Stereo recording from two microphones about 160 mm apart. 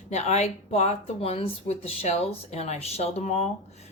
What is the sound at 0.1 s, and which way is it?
Speech, 45° left (ahead or behind).